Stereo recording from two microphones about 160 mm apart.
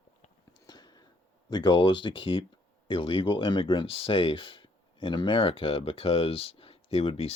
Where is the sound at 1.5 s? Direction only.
30° left (ahead or behind).